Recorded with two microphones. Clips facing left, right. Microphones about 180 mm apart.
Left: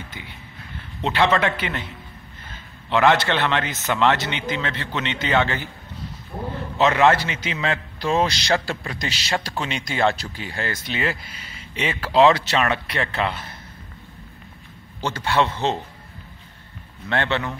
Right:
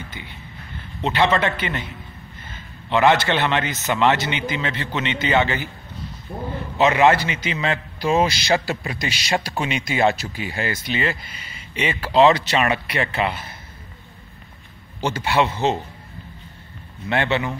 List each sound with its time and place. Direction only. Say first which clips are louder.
1.0 s a man's voice: even; centre (ahead or behind)
2.9 s a man's voice: right 1 dB; centre (ahead or behind)
6.3 s a sound: right 1 dB; 35° right (ahead or behind)
6.8 s a man's voice: right 1 dB; 5° right (ahead or behind)
15.0 s a man's voice: right 1 dB; 15° right (ahead or behind)
17.1 s a man's voice: right 2 dB; 10° right (ahead or behind)